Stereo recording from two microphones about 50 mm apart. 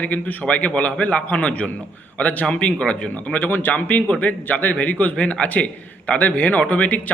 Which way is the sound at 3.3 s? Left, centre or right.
Left.